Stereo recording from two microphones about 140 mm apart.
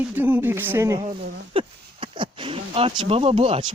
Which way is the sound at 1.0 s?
45° right (ahead or behind).